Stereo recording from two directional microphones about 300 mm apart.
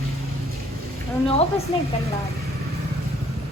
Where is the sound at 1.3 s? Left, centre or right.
Centre.